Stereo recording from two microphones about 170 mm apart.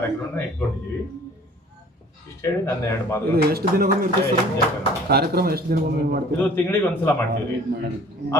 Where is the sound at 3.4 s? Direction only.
65° right (ahead or behind).